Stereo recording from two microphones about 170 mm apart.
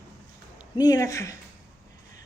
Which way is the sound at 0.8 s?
20° left (ahead or behind).